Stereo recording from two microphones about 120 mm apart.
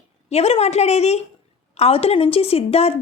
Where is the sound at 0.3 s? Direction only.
60° left (ahead or behind).